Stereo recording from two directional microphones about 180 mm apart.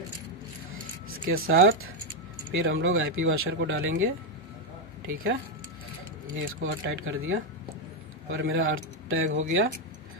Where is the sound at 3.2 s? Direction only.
90° right.